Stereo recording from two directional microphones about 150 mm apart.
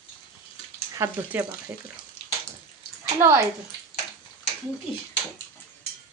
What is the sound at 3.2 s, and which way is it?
Speech, 15° right (ahead or behind).